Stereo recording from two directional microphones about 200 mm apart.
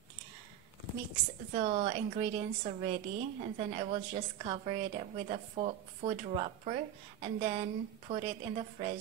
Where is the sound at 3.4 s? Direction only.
30° right (ahead or behind).